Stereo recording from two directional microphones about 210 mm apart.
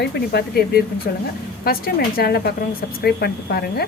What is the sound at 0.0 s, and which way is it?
A woman's voice, 50° left (ahead or behind).